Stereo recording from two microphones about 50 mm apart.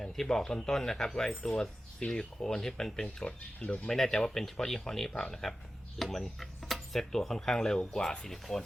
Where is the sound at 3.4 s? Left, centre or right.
Left.